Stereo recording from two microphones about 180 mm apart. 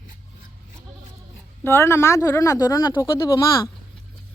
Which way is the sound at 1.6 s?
15° left (ahead or behind).